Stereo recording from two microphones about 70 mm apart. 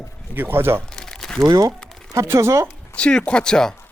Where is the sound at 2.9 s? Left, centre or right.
Centre.